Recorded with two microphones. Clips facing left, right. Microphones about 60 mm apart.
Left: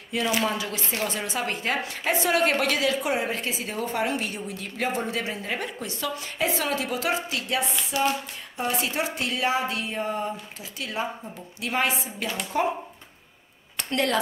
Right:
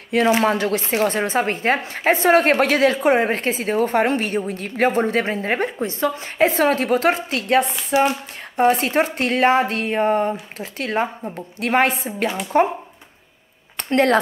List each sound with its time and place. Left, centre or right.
0.4 s a woman's voice: right
7.6 s a woman's voice: right
13.7 s speech: right